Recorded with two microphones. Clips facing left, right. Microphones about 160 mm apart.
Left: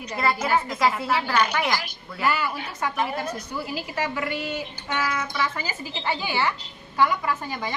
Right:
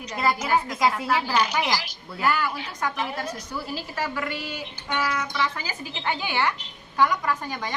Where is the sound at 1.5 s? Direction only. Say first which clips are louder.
Even; 15° right (ahead or behind).